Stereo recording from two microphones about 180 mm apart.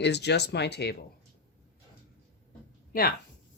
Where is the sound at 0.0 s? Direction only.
70° left (ahead or behind).